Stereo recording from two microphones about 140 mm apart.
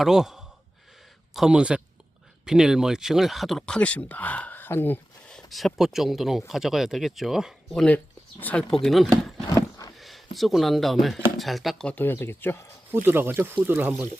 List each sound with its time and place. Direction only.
0.0 s speech: 5° right (ahead or behind)
5.5 s speech: centre (ahead or behind)
8.8 s speech: centre (ahead or behind)
9.5 s a sound: 25° left (ahead or behind)
10.0 s a sound: centre (ahead or behind)
10.3 s speech: centre (ahead or behind)
11.9 s speech: 15° left (ahead or behind)
12.9 s speech: 15° right (ahead or behind)